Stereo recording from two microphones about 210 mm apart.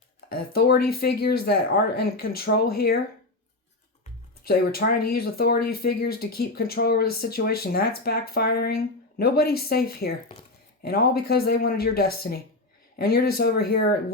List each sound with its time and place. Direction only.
0.3 s speech: 45° left (ahead or behind)
4.4 s speech: 45° left (ahead or behind)